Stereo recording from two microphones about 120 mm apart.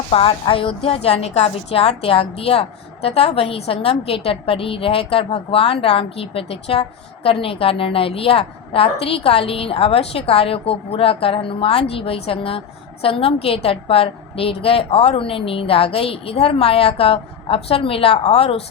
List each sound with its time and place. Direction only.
0.1 s a woman's voice: 50° left (ahead or behind)